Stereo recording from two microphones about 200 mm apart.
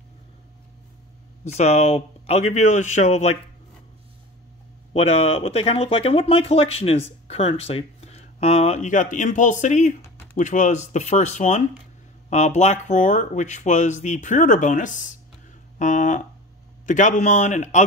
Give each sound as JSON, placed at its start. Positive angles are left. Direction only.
{"t": 1.4, "sound": "speech", "side_deg": 35}
{"t": 4.9, "sound": "speech", "side_deg": 30}